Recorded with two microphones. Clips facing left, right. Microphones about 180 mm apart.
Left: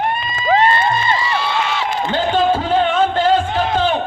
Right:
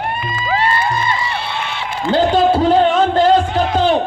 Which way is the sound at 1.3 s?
60° right (ahead or behind).